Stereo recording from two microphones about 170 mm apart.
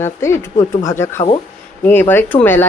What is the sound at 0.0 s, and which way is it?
Speech, 15° left (ahead or behind).